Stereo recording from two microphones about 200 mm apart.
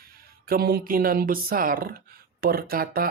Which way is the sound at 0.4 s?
50° right (ahead or behind).